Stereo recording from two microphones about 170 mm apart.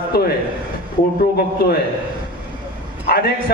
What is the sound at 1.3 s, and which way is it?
Speech, 70° left (ahead or behind).